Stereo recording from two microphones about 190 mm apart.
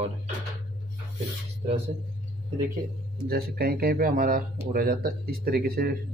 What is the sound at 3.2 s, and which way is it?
Speech, 55° right (ahead or behind).